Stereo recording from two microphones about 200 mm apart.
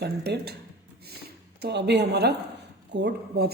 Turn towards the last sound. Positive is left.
turn(degrees=-55)  # may be behind; listen again after turning